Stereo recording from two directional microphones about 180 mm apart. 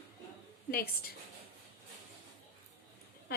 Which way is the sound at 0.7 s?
60° left (ahead or behind).